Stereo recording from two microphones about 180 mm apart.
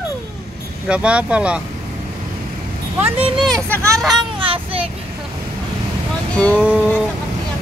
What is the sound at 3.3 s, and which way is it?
Speech, 5° left (ahead or behind).